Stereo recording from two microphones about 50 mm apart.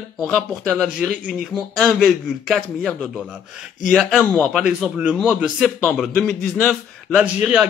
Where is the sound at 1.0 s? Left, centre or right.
Right.